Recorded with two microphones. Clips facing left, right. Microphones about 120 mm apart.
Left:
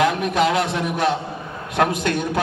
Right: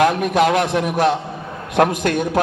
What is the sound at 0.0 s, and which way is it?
Speech, 50° right (ahead or behind).